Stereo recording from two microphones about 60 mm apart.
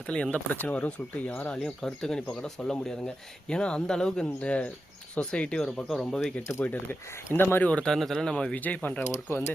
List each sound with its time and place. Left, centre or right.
0.3 s speech: left; by 6.3 s centre
6.7 s speech: left
7.6 s speech: centre
7.9 s speech: centre
8.5 s speech: left